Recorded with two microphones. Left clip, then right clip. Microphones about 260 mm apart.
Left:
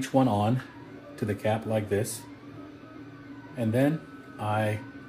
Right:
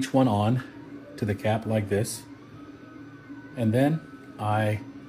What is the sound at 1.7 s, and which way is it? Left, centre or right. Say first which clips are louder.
Speech: right 1 dB; right.